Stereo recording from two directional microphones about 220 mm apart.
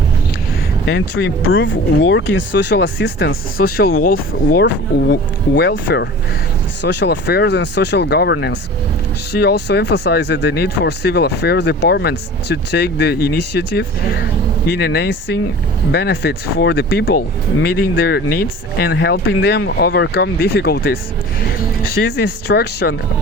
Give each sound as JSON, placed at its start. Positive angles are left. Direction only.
{"t": 0.9, "sound": "speech", "side_deg": 65}
{"t": 22.2, "sound": "speech", "side_deg": 45}